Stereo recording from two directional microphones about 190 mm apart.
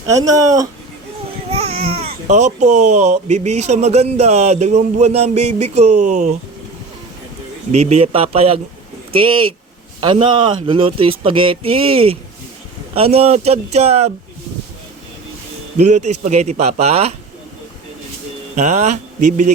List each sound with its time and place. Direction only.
0.1 s speech: 15° right (ahead or behind)
1.5 s speech: 30° right (ahead or behind)
7.7 s speech: 35° right (ahead or behind)
10.0 s speech: 25° right (ahead or behind)
15.8 s speech: 40° right (ahead or behind)
18.5 s speech: 40° right (ahead or behind)